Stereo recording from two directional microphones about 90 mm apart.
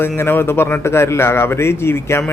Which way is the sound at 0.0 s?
25° left (ahead or behind).